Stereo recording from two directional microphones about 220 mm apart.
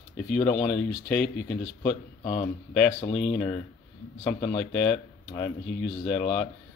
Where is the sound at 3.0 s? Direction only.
35° left (ahead or behind).